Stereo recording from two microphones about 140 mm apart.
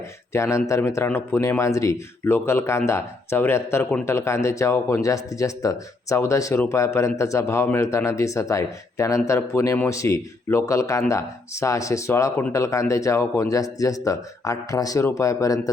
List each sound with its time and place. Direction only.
0.3 s speech: 20° left (ahead or behind)